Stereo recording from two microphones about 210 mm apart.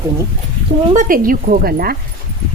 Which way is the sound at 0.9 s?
40° right (ahead or behind).